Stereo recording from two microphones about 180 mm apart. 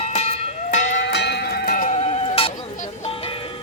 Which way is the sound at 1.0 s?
70° left (ahead or behind).